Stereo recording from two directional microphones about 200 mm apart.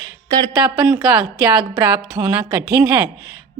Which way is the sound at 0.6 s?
5° right (ahead or behind).